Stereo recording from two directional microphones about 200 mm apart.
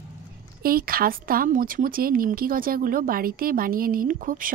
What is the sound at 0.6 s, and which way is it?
Speech, 45° right (ahead or behind).